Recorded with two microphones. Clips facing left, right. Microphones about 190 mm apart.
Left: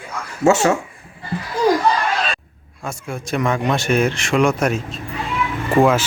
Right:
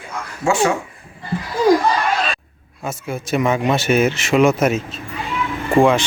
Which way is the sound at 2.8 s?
5° right (ahead or behind).